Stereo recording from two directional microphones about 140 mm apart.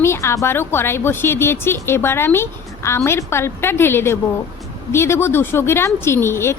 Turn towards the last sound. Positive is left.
turn(degrees=20)  # may be behind; listen again after turning